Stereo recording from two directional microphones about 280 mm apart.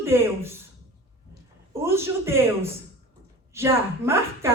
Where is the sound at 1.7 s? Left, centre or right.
Centre.